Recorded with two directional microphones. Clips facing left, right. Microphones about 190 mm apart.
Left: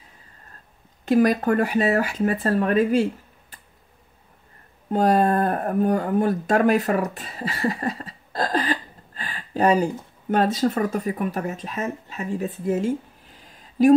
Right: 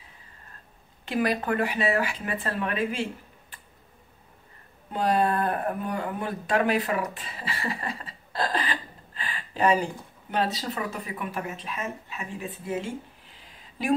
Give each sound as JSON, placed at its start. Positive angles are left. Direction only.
{"t": 1.0, "sound": "speech", "side_deg": 45}
{"t": 4.9, "sound": "speech", "side_deg": 45}